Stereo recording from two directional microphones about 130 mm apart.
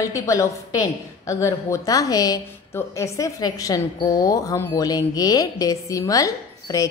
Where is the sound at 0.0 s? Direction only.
25° left (ahead or behind).